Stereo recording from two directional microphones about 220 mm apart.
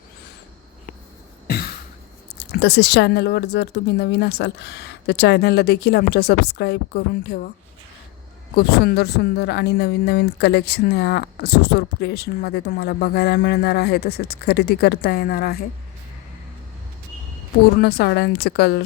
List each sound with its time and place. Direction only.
1.5 s a sound: 45° left (ahead or behind)
2.4 s speech: 50° left (ahead or behind)
8.5 s speech: 45° left (ahead or behind)
17.7 s speech: 45° left (ahead or behind)